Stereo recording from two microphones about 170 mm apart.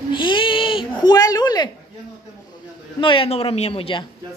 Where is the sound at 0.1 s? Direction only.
30° left (ahead or behind).